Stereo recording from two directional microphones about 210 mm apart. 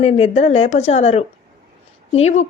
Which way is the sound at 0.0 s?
30° left (ahead or behind).